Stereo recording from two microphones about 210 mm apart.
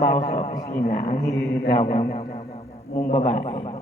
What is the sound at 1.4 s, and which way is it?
Mantra, 50° left (ahead or behind).